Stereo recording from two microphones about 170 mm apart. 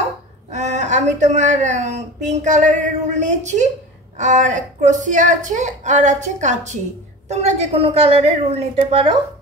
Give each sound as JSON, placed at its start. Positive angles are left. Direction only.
{"t": 0.5, "sound": "a woman's voice", "side_deg": -40}